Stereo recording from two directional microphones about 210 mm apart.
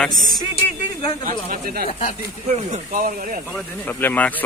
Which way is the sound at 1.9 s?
40° left (ahead or behind).